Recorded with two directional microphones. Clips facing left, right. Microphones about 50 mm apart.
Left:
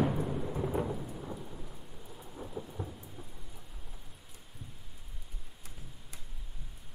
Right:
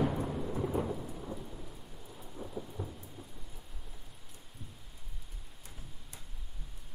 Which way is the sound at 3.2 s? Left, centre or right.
Centre.